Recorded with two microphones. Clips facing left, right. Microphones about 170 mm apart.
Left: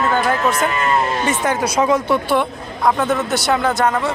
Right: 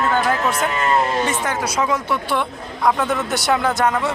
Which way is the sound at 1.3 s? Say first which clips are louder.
Left 4 dB; 15° left (ahead or behind).